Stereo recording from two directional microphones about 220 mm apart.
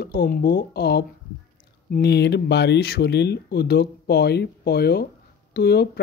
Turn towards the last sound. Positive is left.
turn(degrees=45)  # may be behind; listen again after turning